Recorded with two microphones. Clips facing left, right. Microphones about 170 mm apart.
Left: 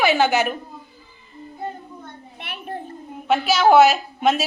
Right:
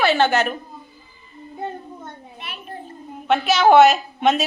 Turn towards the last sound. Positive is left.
turn(degrees=0)  # may be behind; listen again after turning